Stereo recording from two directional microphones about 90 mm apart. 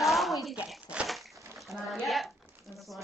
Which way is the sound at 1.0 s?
10° right (ahead or behind).